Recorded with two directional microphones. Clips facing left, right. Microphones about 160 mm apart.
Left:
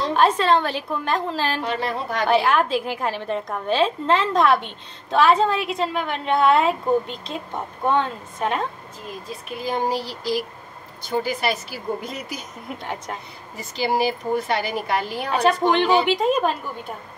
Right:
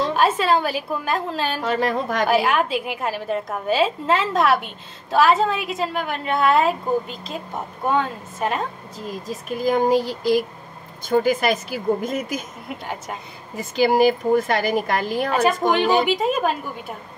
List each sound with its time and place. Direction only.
0.0 s a woman's voice: 5° right (ahead or behind)
1.6 s a woman's voice: 45° right (ahead or behind)
2.2 s a woman's voice: 5° right (ahead or behind)
9.0 s a woman's voice: 40° right (ahead or behind)
12.6 s a woman's voice: centre (ahead or behind)
13.6 s a woman's voice: 50° right (ahead or behind)
16.1 s a woman's voice: 5° right (ahead or behind)